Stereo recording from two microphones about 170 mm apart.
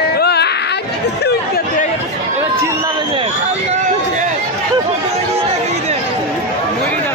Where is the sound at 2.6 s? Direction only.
25° right (ahead or behind).